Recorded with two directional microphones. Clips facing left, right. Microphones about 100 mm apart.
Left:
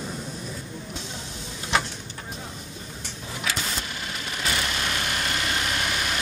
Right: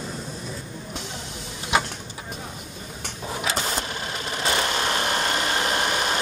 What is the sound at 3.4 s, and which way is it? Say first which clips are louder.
Vehicle: right 3 dB; 35° right (ahead or behind).